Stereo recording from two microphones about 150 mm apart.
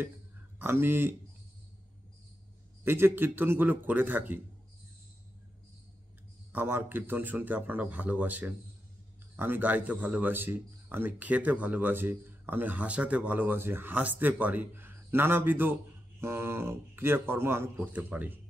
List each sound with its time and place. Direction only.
0.6 s speech: 15° right (ahead or behind)
2.8 s speech: 15° right (ahead or behind)
6.5 s speech: 15° right (ahead or behind)